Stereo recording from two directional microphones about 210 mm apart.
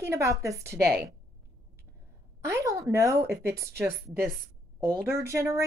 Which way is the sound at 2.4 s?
15° right (ahead or behind).